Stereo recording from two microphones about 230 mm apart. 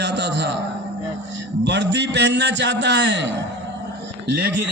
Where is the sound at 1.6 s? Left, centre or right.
Right.